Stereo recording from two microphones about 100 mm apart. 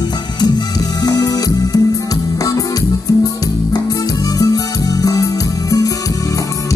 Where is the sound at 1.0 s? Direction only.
40° left (ahead or behind).